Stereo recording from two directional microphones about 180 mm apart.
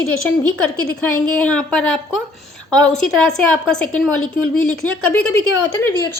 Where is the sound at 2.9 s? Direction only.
5° left (ahead or behind).